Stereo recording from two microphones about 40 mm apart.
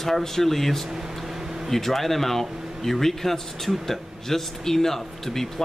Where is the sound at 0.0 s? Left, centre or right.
Centre.